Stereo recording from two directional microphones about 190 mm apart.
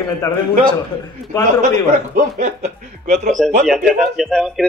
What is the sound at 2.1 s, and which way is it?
Speech, 40° right (ahead or behind).